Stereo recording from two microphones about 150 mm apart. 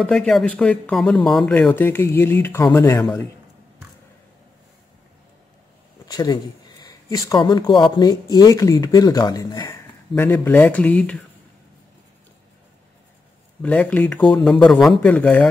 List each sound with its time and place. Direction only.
0.0 s speech: 5° left (ahead or behind)
6.0 s speech: 25° left (ahead or behind)
10.1 s speech: 15° left (ahead or behind)
13.6 s speech: 10° left (ahead or behind)